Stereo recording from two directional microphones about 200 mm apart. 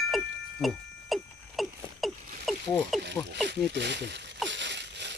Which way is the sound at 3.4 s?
60° right (ahead or behind).